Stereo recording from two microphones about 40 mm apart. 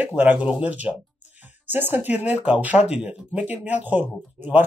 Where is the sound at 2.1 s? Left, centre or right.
Right.